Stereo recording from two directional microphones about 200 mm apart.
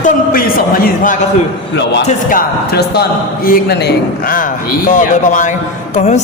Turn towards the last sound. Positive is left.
turn(degrees=35)  # may be behind; listen again after turning